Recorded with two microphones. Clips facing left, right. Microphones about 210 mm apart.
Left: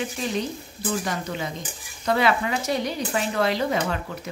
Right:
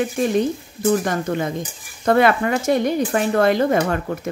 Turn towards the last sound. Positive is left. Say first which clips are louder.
# right 7 dB
turn(degrees=-50)  # may be behind; listen again after turning